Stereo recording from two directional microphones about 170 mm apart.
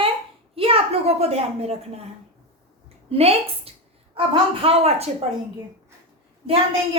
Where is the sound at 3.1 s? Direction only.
35° right (ahead or behind).